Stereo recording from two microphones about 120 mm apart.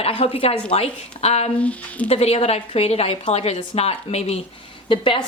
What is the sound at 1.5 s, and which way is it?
Speech, 10° left (ahead or behind).